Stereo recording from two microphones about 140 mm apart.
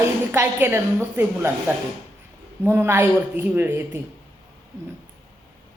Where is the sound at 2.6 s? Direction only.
15° right (ahead or behind).